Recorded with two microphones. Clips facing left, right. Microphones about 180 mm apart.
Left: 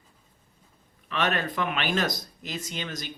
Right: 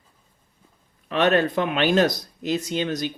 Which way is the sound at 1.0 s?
40° right (ahead or behind).